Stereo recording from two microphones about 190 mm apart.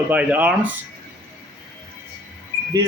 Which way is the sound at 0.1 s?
10° right (ahead or behind).